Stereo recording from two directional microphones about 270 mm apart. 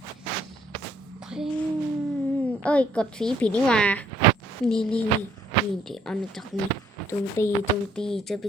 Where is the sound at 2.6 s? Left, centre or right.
Centre.